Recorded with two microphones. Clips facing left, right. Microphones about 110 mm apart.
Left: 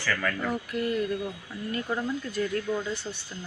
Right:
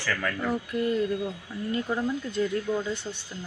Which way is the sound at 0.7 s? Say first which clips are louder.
Right 2 dB; 20° right (ahead or behind).